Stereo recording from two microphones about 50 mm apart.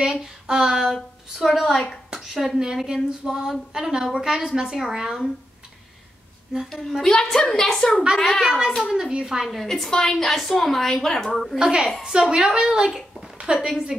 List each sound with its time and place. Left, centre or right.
0.0 s a woman's voice: centre
7.0 s a woman's voice: centre
8.4 s a woman's voice: centre
9.5 s a woman's voice: centre
11.5 s a woman's voice: centre